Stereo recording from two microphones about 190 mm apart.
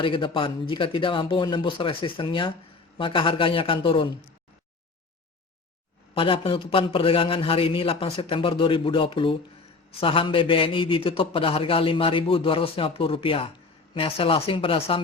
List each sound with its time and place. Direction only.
0.0 s a man's voice: 25° left (ahead or behind)
6.1 s a man's voice: 30° left (ahead or behind)